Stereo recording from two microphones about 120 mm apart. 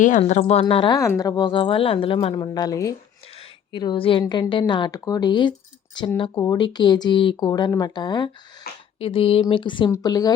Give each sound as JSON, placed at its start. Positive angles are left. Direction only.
{"t": 0.3, "sound": "a woman's voice", "side_deg": 65}
{"t": 0.6, "sound": "speech", "side_deg": 40}
{"t": 0.9, "sound": "speech", "side_deg": 25}
{"t": 3.7, "sound": "speech", "side_deg": 40}
{"t": 9.0, "sound": "speech", "side_deg": 50}
{"t": 9.9, "sound": "speech", "side_deg": 30}